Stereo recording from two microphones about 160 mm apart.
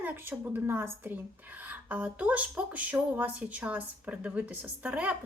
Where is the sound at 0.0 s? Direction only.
10° right (ahead or behind).